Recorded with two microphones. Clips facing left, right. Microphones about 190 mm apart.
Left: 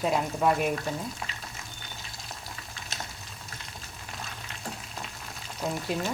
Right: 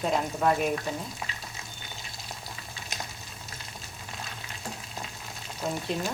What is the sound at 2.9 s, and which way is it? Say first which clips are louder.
Boiling: right 1 dB; 15° right (ahead or behind).